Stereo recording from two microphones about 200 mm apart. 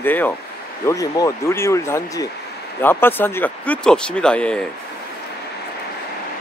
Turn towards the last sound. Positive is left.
turn(degrees=5)  # may be behind; listen again after turning